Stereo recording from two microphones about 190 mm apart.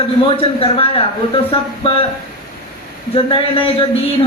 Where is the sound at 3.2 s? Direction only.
30° left (ahead or behind).